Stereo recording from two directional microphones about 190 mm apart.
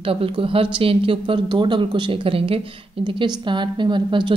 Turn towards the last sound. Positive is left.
turn(degrees=-25)  # may be behind; listen again after turning